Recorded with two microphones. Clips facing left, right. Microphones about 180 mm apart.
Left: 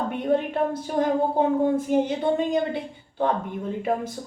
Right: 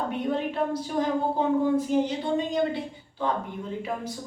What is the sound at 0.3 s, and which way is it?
A woman's voice, 50° left (ahead or behind).